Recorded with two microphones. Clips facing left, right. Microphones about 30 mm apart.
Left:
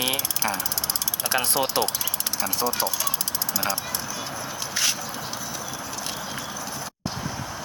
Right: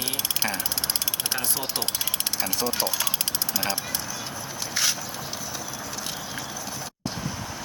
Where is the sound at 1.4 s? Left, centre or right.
Left.